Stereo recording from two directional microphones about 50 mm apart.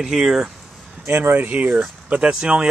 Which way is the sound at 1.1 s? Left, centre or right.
Right.